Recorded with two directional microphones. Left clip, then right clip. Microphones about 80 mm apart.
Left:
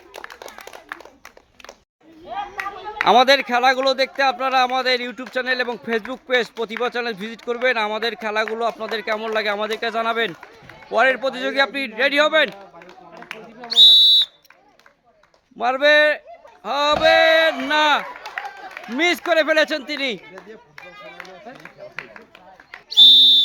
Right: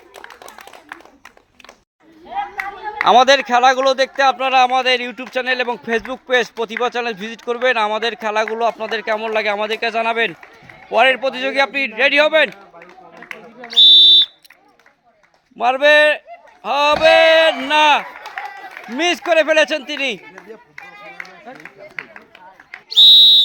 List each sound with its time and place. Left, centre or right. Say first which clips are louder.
2.6 s speech: right 3 dB; centre
13.8 s a sound: right 3 dB; right
15.5 s speech: right 3 dB; centre